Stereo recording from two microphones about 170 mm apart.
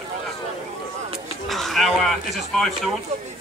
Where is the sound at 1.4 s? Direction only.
Centre (ahead or behind).